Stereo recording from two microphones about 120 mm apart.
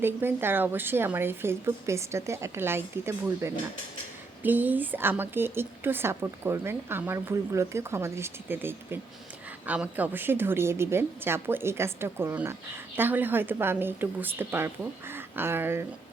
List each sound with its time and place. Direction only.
0.0 s a woman's voice: 20° right (ahead or behind)